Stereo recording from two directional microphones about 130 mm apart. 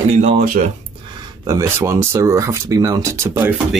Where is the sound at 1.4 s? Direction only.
25° right (ahead or behind).